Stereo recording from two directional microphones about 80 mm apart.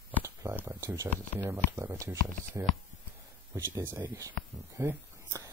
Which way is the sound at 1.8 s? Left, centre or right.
Right.